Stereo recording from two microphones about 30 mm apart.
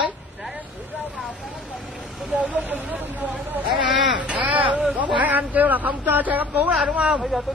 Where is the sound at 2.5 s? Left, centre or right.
Right.